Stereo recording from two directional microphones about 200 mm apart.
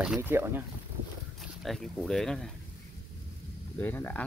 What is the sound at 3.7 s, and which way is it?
Speech, 10° left (ahead or behind).